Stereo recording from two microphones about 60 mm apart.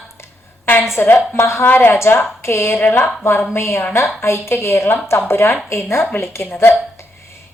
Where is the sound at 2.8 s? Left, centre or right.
Left.